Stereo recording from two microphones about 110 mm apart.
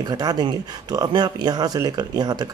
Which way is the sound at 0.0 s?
35° right (ahead or behind).